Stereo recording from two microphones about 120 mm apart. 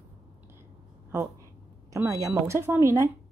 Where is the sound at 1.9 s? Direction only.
25° right (ahead or behind).